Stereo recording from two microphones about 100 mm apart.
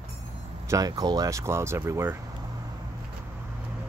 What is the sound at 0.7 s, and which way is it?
Speech, 35° right (ahead or behind).